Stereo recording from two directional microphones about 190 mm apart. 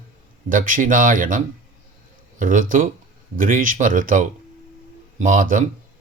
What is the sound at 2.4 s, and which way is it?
Speech, 45° right (ahead or behind).